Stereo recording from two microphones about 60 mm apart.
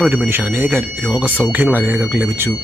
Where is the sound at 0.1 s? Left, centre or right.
Right.